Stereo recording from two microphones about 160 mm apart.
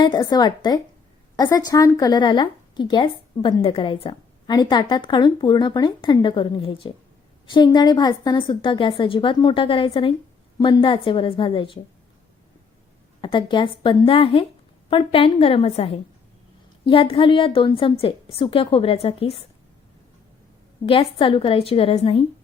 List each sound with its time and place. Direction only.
0.0 s a woman's voice: 25° left (ahead or behind)
13.2 s a woman's voice: 30° left (ahead or behind)
20.8 s a woman's voice: 35° left (ahead or behind)